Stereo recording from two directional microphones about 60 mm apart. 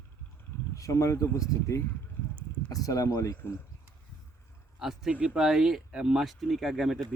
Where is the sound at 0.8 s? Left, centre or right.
Left.